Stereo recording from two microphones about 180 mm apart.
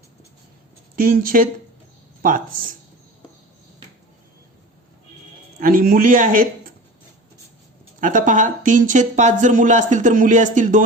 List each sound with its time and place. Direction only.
0.9 s speech: 50° right (ahead or behind)
5.5 s a man's voice: 50° right (ahead or behind)
8.0 s speech: 45° right (ahead or behind)